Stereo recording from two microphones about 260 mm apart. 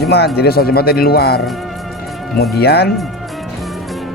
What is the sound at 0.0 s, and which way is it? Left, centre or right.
Speech, left.